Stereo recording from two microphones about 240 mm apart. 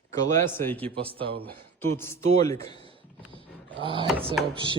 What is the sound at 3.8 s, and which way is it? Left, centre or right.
Speech, right.